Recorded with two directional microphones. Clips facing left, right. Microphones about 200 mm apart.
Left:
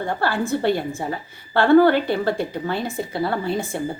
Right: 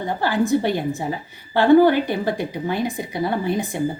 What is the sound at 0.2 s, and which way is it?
Speech, 15° right (ahead or behind).